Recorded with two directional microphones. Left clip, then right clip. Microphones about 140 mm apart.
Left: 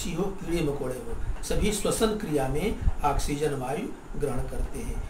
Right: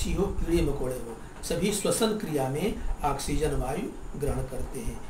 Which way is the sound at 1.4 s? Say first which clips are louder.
Even; 20° right (ahead or behind).